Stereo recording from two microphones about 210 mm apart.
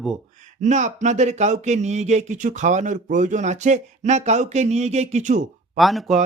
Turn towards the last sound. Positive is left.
turn(degrees=0)  # may be behind; listen again after turning